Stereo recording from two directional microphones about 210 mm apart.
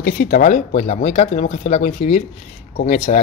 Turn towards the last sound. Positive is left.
turn(degrees=35)  # may be behind; listen again after turning